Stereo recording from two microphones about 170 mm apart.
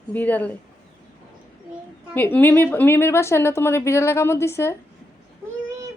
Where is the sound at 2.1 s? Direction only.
10° left (ahead or behind).